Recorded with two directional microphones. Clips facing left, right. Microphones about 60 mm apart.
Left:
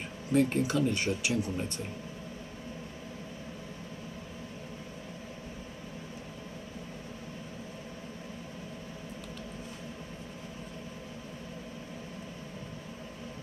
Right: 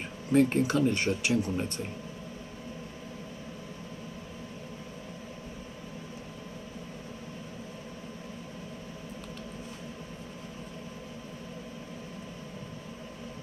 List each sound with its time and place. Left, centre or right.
0.3 s speech: right